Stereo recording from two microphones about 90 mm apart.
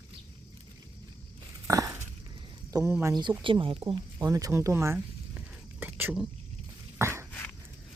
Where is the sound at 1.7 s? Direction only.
40° right (ahead or behind).